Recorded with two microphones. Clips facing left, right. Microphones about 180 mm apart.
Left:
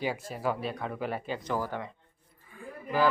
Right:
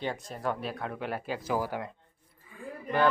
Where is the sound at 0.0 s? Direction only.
5° left (ahead or behind).